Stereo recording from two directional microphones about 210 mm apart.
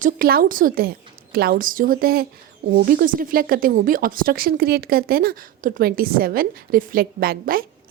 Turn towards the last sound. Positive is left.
turn(degrees=-45)  # may be behind; listen again after turning